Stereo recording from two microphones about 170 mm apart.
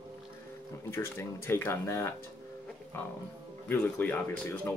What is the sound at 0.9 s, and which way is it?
Speech, 15° left (ahead or behind).